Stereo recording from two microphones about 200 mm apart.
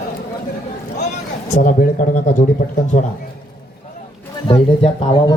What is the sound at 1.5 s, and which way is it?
Speech, 40° left (ahead or behind).